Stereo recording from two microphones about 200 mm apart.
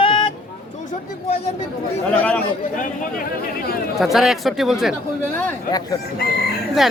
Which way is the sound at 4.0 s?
Centre (ahead or behind).